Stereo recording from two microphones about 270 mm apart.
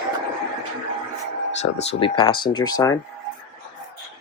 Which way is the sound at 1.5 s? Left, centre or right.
Left.